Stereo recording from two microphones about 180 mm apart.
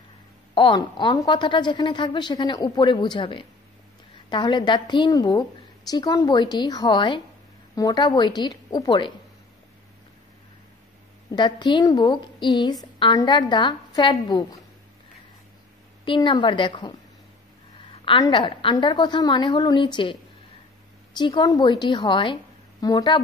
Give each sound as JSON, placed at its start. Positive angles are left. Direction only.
{"t": 0.6, "sound": "a woman's voice", "side_deg": 25}
{"t": 11.3, "sound": "a woman's voice", "side_deg": 25}
{"t": 16.1, "sound": "a woman's voice", "side_deg": 25}
{"t": 18.0, "sound": "a woman's voice", "side_deg": 25}
{"t": 21.2, "sound": "a woman's voice", "side_deg": 25}